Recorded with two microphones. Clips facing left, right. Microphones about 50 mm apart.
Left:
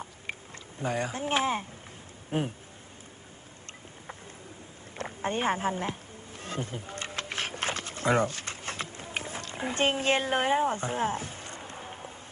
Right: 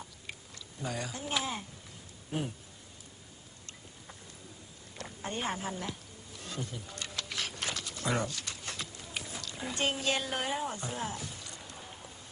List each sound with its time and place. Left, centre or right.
0.8 s speech: left
4.9 s insect: left